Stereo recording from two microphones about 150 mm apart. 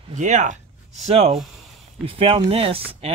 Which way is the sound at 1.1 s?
40° right (ahead or behind).